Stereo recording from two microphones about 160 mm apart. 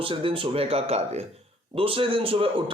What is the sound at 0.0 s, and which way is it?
A man's voice, 35° right (ahead or behind).